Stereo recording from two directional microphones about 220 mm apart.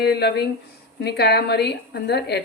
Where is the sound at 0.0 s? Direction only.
45° left (ahead or behind).